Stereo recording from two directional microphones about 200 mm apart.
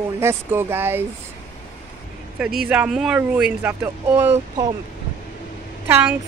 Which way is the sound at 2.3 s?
5° right (ahead or behind).